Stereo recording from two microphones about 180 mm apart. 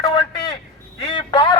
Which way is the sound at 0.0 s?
25° left (ahead or behind).